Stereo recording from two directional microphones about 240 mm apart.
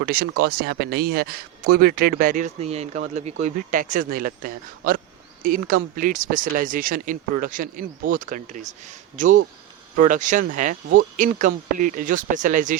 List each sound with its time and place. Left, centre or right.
0.0 s speech: right